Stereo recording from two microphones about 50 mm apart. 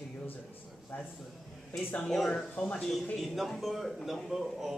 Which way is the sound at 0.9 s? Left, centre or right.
Left.